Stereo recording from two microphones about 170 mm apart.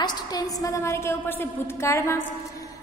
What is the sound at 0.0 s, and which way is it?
A woman's voice, 20° left (ahead or behind).